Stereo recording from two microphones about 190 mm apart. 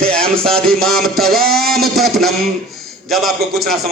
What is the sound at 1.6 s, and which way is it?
Speech, 55° right (ahead or behind).